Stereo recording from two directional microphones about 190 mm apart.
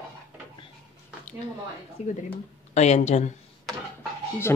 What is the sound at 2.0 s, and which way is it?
Speech, 35° left (ahead or behind).